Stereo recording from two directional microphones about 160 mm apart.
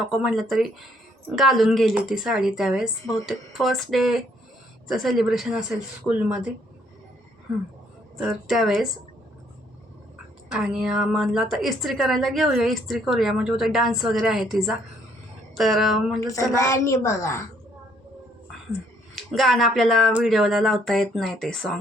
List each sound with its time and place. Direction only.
0.0 s a woman's voice: 5° right (ahead or behind)
8.2 s a woman's voice: centre (ahead or behind)
10.5 s a woman's voice: 5° right (ahead or behind)
16.2 s a woman's voice: 20° left (ahead or behind)
19.1 s a woman's voice: centre (ahead or behind)